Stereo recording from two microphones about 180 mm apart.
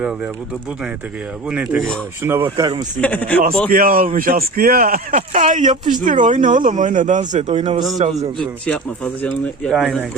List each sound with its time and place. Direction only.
1.5 s speech: 5° right (ahead or behind)
2.6 s speech: 25° right (ahead or behind)
3.0 s speech: 10° left (ahead or behind)
3.7 s speech: 50° right (ahead or behind)
5.1 s speech: 40° right (ahead or behind)
9.2 s speech: 5° left (ahead or behind)